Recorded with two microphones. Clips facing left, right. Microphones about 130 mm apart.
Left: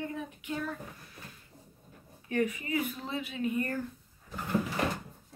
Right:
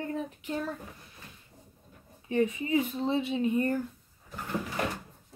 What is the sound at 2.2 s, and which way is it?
Speech, 25° right (ahead or behind).